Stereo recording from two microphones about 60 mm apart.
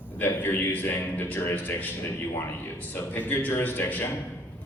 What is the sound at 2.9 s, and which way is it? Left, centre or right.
A man's voice, left.